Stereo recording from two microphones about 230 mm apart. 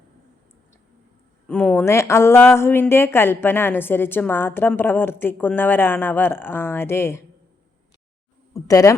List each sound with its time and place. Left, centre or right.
1.5 s speech: centre
8.5 s speech: centre